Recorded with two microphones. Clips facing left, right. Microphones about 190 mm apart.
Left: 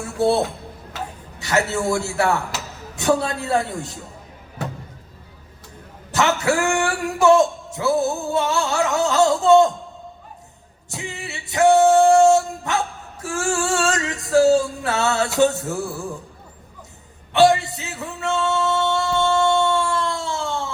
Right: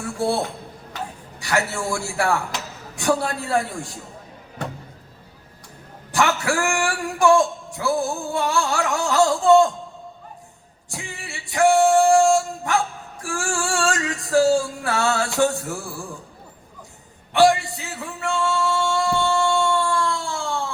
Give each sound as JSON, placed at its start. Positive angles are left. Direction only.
{"t": 0.2, "sound": "a man's voice", "side_deg": 20}
{"t": 6.1, "sound": "speech", "side_deg": 20}
{"t": 10.8, "sound": "music", "side_deg": 20}
{"t": 13.2, "sound": "female singing", "side_deg": 20}
{"t": 15.4, "sound": "a man's voice", "side_deg": 20}
{"t": 17.3, "sound": "music", "side_deg": 20}